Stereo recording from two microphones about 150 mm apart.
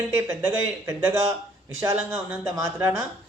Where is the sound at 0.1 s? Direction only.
20° right (ahead or behind).